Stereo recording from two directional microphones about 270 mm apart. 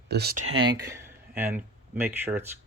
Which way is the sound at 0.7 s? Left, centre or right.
Centre.